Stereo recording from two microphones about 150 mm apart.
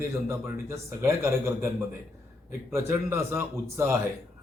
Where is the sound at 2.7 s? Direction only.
15° right (ahead or behind).